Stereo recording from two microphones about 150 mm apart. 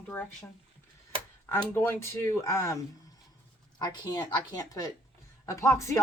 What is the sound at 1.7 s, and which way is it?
Speech, 15° left (ahead or behind).